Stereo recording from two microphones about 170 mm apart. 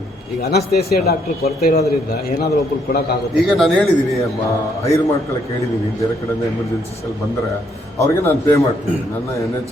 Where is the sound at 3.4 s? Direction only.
5° left (ahead or behind).